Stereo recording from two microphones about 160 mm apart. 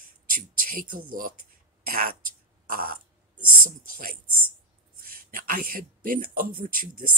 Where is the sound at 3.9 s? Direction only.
60° right (ahead or behind).